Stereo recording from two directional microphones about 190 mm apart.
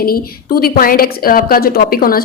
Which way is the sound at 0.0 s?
50° left (ahead or behind).